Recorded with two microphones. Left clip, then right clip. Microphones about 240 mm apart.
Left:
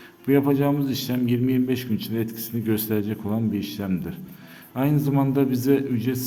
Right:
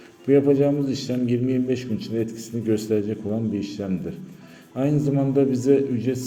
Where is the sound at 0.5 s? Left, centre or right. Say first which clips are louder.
Right 2 dB; left.